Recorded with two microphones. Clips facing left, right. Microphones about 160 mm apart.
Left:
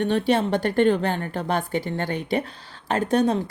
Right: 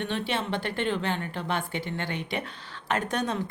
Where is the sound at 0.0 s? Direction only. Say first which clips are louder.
Left 9 dB; 40° left (ahead or behind).